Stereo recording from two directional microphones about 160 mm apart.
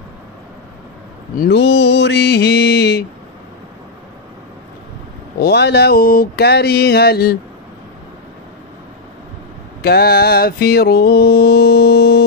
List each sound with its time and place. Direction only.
1.3 s mantra: 75° left (ahead or behind)
5.4 s a sound: 90° left
9.8 s mantra: 80° left